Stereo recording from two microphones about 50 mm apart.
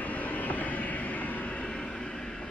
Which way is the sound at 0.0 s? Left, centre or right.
Left.